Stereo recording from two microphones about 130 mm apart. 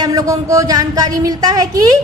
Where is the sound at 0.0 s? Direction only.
25° right (ahead or behind).